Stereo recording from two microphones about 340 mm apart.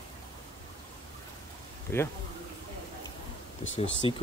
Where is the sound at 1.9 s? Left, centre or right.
Centre.